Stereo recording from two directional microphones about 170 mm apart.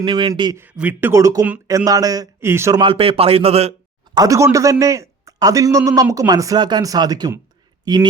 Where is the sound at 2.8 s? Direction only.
35° right (ahead or behind).